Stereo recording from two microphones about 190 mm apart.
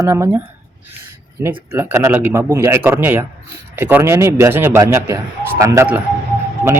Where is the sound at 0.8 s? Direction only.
10° right (ahead or behind).